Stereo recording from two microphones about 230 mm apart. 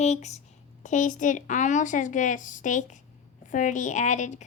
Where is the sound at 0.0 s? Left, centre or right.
Left.